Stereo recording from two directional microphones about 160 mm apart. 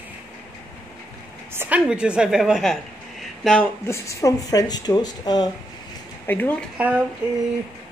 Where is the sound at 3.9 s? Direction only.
20° left (ahead or behind).